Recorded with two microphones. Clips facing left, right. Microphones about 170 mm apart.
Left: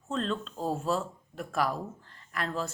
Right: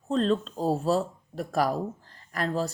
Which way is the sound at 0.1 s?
35° right (ahead or behind).